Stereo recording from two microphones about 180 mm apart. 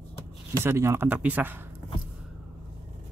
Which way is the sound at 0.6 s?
15° right (ahead or behind).